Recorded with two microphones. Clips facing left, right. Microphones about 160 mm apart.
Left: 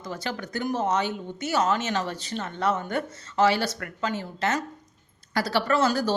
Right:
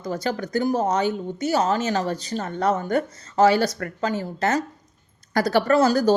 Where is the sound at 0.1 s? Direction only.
40° right (ahead or behind).